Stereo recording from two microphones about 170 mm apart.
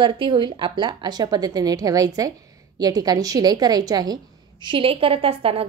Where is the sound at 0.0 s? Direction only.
30° right (ahead or behind).